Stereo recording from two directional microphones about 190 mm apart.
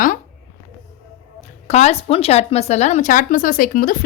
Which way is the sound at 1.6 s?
35° left (ahead or behind).